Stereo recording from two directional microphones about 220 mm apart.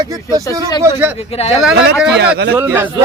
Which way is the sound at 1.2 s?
25° left (ahead or behind).